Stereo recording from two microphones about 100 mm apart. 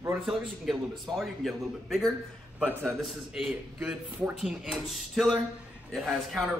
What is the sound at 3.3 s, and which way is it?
A man's voice, centre (ahead or behind).